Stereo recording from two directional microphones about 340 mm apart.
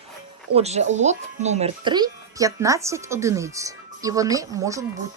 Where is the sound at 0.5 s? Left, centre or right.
Centre.